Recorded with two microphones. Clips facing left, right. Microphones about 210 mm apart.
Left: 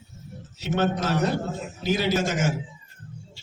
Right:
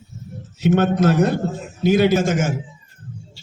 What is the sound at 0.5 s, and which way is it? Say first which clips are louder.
A man's voice: right 8 dB; 50° right (ahead or behind).